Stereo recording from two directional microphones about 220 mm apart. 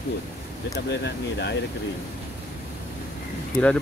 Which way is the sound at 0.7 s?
50° left (ahead or behind).